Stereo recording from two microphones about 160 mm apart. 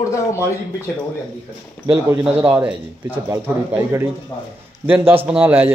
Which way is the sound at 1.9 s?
15° right (ahead or behind).